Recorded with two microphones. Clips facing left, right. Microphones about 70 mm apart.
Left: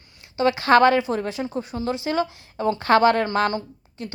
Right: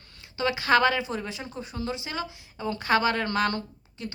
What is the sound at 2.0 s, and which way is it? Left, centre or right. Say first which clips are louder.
A woman's voice: left 10 dB; left.